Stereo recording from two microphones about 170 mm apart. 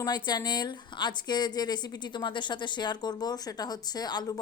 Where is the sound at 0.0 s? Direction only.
25° left (ahead or behind).